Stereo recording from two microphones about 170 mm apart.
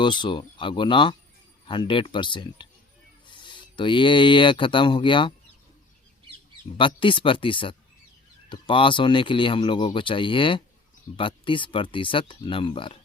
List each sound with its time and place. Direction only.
0.0 s speech: 25° left (ahead or behind)
3.2 s filing: 30° left (ahead or behind)
6.7 s speech: 30° left (ahead or behind)